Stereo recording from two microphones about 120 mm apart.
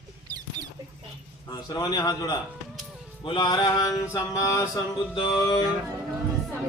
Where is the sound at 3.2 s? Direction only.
40° left (ahead or behind).